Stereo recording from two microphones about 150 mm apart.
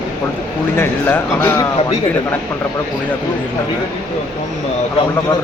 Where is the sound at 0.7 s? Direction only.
15° left (ahead or behind).